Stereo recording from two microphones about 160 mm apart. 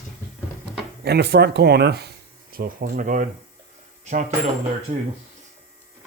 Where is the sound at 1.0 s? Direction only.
90° right; by 4.3 s 45° right (ahead or behind).